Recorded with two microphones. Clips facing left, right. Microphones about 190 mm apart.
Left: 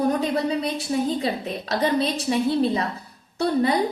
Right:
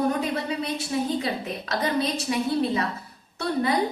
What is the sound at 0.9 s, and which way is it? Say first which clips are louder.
A woman's voice: left 3 dB; 30° left (ahead or behind).